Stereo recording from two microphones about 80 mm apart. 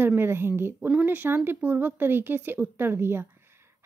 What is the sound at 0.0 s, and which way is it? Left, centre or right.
A woman's voice, right.